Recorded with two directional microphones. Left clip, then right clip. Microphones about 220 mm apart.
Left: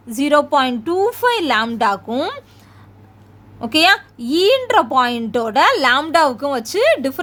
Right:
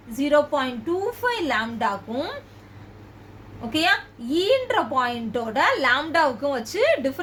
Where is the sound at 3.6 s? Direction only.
50° left (ahead or behind).